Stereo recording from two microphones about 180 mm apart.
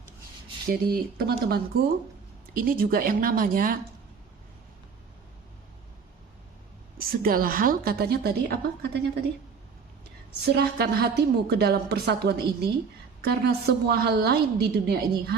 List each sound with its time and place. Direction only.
0.7 s a woman's voice: 60° right (ahead or behind)
7.0 s a woman's voice: 55° right (ahead or behind)
10.4 s a woman's voice: 65° right (ahead or behind)